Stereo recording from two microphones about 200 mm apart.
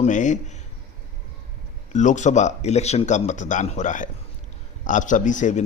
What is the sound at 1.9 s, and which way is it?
A man's voice, 35° left (ahead or behind).